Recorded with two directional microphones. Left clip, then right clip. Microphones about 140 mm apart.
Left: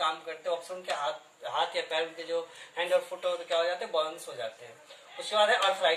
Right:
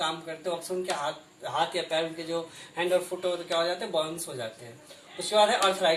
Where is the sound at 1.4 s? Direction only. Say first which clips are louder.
Right 2 dB; 25° left (ahead or behind).